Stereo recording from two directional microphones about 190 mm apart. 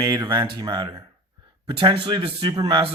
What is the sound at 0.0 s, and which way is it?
Speech, 20° right (ahead or behind).